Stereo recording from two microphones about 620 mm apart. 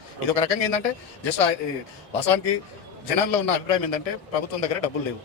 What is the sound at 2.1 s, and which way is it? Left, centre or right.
A man's voice, left.